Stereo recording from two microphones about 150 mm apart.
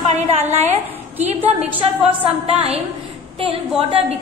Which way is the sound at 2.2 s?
40° right (ahead or behind).